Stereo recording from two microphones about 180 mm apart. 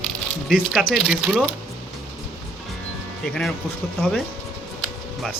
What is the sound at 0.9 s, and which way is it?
Speech, centre (ahead or behind).